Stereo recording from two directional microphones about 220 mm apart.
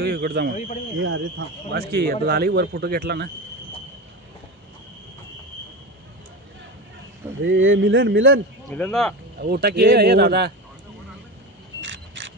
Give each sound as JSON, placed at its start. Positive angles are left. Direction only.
{"t": 0.0, "sound": "a sound", "side_deg": -45}
{"t": 0.9, "sound": "speech", "side_deg": -60}
{"t": 7.4, "sound": "speech", "side_deg": -60}
{"t": 8.6, "sound": "speech", "side_deg": 5}
{"t": 9.4, "sound": "speech", "side_deg": -45}
{"t": 11.8, "sound": "camera", "side_deg": -55}